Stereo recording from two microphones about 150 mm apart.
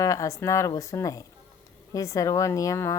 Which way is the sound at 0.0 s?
20° left (ahead or behind).